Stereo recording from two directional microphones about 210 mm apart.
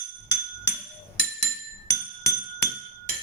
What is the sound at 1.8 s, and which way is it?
Glass, 15° left (ahead or behind).